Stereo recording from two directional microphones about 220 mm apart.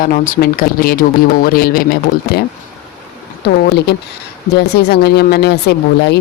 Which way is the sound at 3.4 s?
45° left (ahead or behind).